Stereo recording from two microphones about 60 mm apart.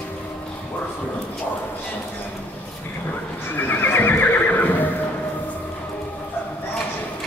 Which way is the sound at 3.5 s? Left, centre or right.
Left.